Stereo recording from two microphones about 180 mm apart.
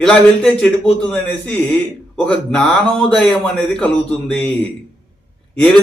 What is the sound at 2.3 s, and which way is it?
Speech, 5° left (ahead or behind).